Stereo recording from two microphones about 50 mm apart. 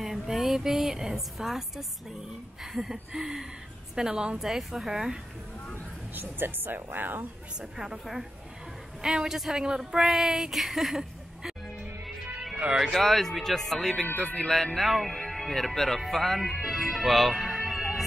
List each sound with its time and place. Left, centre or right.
0.0 s a woman's voice: centre
4.4 s speech: centre
6.1 s speech: right
7.7 s speech: centre
12.9 s speech: centre
14.1 s music: centre
14.5 s speech: centre